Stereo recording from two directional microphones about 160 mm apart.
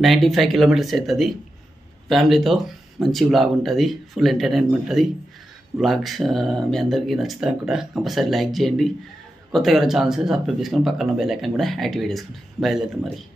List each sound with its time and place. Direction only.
0.0 s speech: centre (ahead or behind)